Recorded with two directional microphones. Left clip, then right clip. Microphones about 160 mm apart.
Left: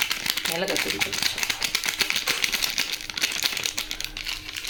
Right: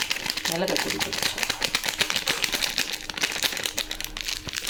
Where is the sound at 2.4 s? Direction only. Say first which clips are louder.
Left 1 dB; 15° right (ahead or behind).